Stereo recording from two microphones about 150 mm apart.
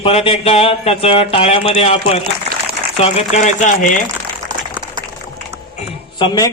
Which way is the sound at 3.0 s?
45° left (ahead or behind).